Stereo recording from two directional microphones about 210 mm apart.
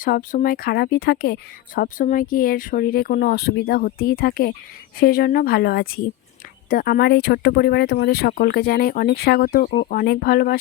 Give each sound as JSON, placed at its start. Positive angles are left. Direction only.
{"t": 0.0, "sound": "speech", "side_deg": 40}